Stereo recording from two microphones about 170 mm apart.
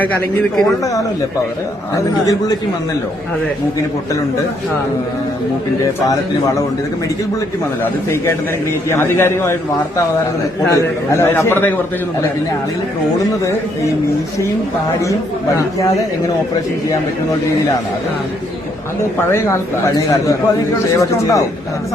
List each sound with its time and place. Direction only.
0.0 s a man's voice: 5° left (ahead or behind)
2.0 s a man's voice: 20° left (ahead or behind)
6.1 s a man's voice: 20° left (ahead or behind)
8.1 s a man's voice: 15° left (ahead or behind)
10.7 s a man's voice: 15° left (ahead or behind)
19.3 s a man's voice: 15° left (ahead or behind)